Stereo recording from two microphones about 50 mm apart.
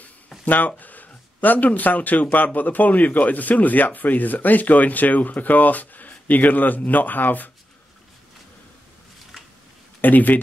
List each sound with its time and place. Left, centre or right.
0.5 s speech: left
10.0 s speech: left